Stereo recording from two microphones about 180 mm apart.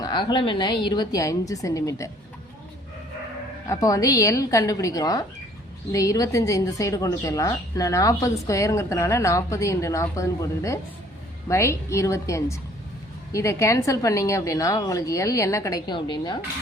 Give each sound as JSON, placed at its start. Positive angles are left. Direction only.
{"t": 0.0, "sound": "a woman's voice", "side_deg": 25}
{"t": 3.7, "sound": "a woman's voice", "side_deg": 20}